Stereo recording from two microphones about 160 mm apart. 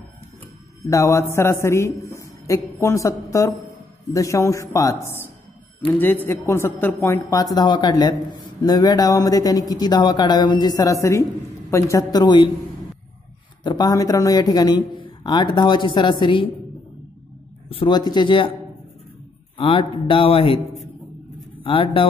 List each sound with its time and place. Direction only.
0.8 s a man's voice: 20° left (ahead or behind)
13.7 s a man's voice: 25° left (ahead or behind)
17.6 s a man's voice: 30° left (ahead or behind)
19.5 s a man's voice: 35° left (ahead or behind)
21.6 s a man's voice: 35° left (ahead or behind)